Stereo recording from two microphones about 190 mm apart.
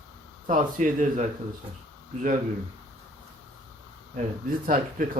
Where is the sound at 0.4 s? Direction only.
40° right (ahead or behind).